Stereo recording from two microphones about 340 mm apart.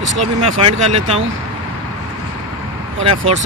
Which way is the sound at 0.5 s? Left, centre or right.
Centre.